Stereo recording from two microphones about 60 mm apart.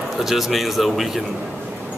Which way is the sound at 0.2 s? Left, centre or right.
Centre.